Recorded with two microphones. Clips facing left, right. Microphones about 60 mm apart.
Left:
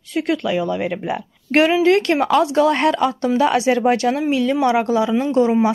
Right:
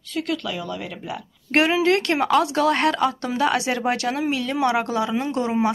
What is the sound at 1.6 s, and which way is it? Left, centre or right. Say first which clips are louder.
Speech: left 5 dB; centre.